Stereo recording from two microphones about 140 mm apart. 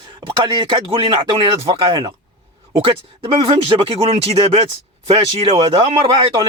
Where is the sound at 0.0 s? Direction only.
35° right (ahead or behind).